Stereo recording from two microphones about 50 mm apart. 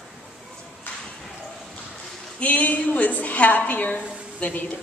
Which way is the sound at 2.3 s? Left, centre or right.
Left.